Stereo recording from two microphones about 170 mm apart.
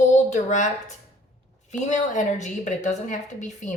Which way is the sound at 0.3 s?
45° left (ahead or behind).